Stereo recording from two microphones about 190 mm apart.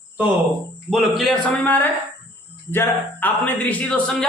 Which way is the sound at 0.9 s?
Centre (ahead or behind).